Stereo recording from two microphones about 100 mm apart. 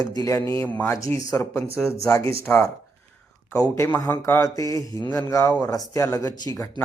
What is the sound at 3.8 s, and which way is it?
Speech, 25° left (ahead or behind).